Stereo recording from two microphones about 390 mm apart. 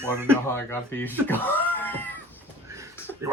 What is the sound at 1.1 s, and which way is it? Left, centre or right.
Cat, centre.